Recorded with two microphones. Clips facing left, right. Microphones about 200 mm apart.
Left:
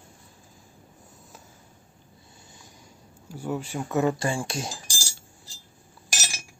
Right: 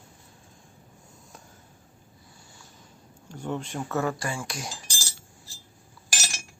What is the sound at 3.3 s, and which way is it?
Speech, 10° left (ahead or behind).